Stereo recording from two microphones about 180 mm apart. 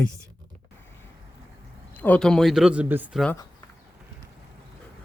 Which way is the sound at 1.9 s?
10° left (ahead or behind).